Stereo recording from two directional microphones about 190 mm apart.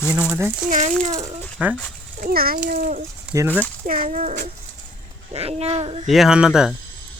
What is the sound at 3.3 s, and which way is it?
Speech, 10° right (ahead or behind).